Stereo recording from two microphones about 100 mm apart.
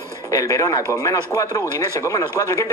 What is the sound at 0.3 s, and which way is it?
Speech, 35° left (ahead or behind).